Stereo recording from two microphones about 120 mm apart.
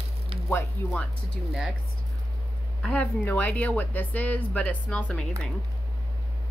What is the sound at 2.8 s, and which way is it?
Speech, 10° left (ahead or behind).